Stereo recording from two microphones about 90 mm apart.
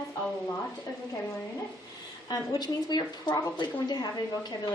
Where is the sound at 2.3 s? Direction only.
50° left (ahead or behind).